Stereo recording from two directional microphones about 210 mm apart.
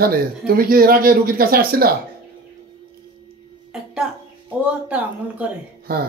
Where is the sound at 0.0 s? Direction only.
45° right (ahead or behind).